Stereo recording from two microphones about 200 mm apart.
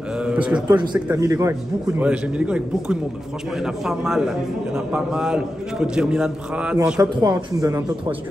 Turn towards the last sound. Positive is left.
turn(degrees=-15)  # may be behind; listen again after turning